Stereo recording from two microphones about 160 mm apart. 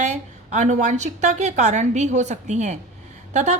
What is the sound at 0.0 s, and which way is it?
Speech, 45° right (ahead or behind).